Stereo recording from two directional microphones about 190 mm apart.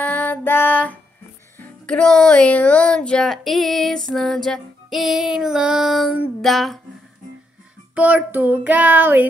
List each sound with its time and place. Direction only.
0.0 s child singing: 10° left (ahead or behind)
1.6 s music: 5° left (ahead or behind)
7.9 s child singing: 10° right (ahead or behind)